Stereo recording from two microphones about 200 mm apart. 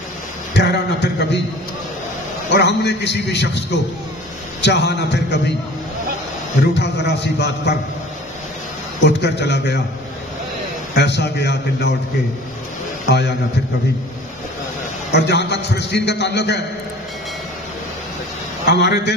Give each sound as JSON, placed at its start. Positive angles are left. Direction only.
{"t": 0.6, "sound": "a sound", "side_deg": 60}
{"t": 2.5, "sound": "a man's voice", "side_deg": 60}
{"t": 4.6, "sound": "a man's voice", "side_deg": 60}
{"t": 6.8, "sound": "a man's voice", "side_deg": 60}
{"t": 9.0, "sound": "a man's voice", "side_deg": 60}
{"t": 11.0, "sound": "a man's voice", "side_deg": 60}
{"t": 13.0, "sound": "a man's voice", "side_deg": 60}
{"t": 15.1, "sound": "a man's voice", "side_deg": 60}
{"t": 18.7, "sound": "a man's voice", "side_deg": 60}